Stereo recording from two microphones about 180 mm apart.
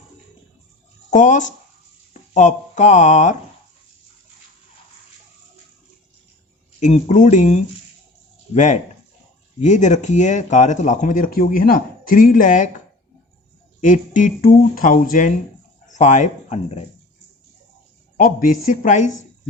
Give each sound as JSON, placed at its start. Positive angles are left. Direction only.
{"t": 1.1, "sound": "speech", "side_deg": 45}
{"t": 6.7, "sound": "speech", "side_deg": 40}
{"t": 13.8, "sound": "speech", "side_deg": 45}
{"t": 18.2, "sound": "speech", "side_deg": 50}